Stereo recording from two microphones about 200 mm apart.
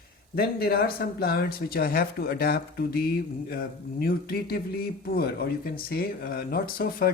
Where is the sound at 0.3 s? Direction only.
50° left (ahead or behind).